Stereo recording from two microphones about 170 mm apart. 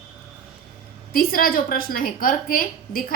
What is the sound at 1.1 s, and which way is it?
A woman's voice, 60° left (ahead or behind).